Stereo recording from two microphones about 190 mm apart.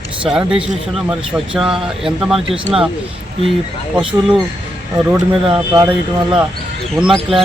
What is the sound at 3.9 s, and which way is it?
Speech, 5° right (ahead or behind).